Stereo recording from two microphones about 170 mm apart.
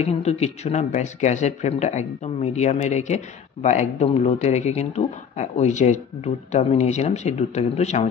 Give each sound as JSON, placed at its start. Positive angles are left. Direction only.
{"t": 0.0, "sound": "a man's voice", "side_deg": 40}